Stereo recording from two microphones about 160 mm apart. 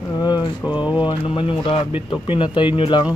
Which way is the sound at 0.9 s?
30° left (ahead or behind).